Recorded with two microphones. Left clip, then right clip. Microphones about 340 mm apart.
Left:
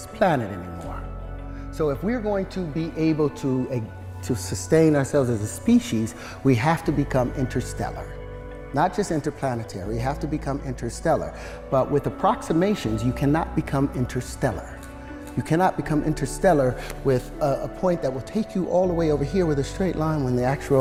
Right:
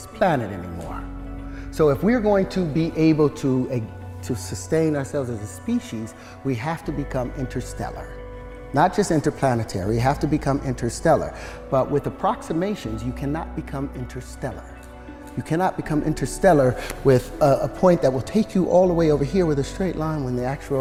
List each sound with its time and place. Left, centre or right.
0.2 s speech: centre
1.8 s speech: right
3.5 s speech: centre
4.3 s speech: centre
4.7 s speech: left
7.8 s speech: centre
8.7 s speech: right
11.7 s speech: centre
12.2 s speech: centre
12.5 s speech: left
15.4 s speech: centre
15.8 s speech: centre
16.4 s speech: right
19.8 s speech: centre; by 20.7 s left